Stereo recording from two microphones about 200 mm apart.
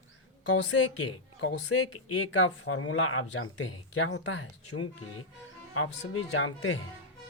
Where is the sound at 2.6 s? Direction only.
90° left.